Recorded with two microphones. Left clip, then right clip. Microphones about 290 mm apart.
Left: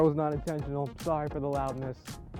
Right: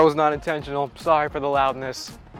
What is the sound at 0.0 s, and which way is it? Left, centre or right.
Speech, centre.